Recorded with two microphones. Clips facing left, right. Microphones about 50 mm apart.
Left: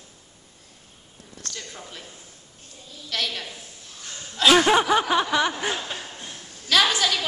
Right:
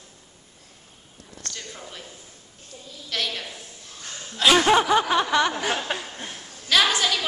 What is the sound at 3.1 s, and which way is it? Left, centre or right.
A woman's voice, centre.